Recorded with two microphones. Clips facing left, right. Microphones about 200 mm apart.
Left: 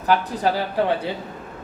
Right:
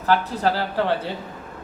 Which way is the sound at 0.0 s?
15° left (ahead or behind).